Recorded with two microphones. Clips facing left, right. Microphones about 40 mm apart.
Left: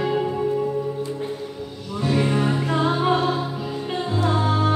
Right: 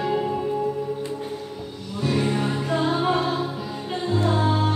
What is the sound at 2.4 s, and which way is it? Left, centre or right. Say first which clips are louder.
Music: left 2 dB; left.